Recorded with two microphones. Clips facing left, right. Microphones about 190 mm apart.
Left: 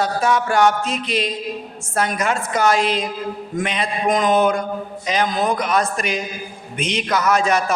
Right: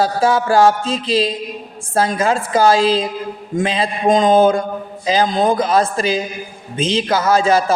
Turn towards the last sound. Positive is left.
turn(degrees=-30)  # may be behind; listen again after turning